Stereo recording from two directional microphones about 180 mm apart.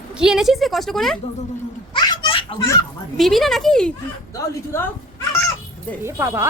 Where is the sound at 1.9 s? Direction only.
25° left (ahead or behind).